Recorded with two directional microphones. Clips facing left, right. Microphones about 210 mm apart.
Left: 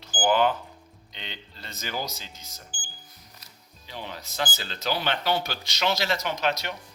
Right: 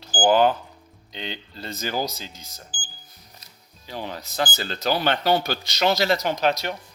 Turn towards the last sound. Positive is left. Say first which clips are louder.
# right 5 dB
turn(degrees=-35)  # may be behind; listen again after turning